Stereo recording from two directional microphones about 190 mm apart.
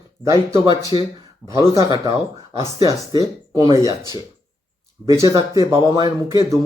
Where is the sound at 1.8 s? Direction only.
20° right (ahead or behind).